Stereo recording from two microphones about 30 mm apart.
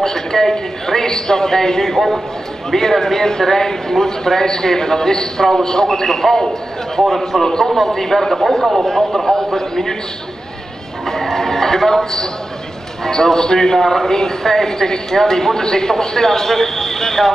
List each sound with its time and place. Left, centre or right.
0.0 s a man's voice: centre
1.9 s a man's voice: centre
7.0 s a man's voice: centre
7.4 s speech: centre
11.1 s speech: centre